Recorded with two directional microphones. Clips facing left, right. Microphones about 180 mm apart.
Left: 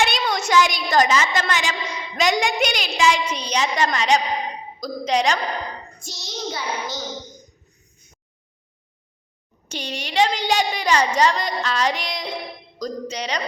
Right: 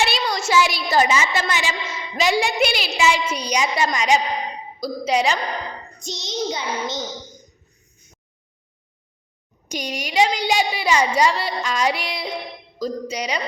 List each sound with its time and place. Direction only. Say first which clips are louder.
0.0 s a woman's voice: even; centre (ahead or behind)
6.0 s a child's voice: right 8 dB; 20° right (ahead or behind)
9.6 s a woman's voice: right 2 dB; 10° right (ahead or behind)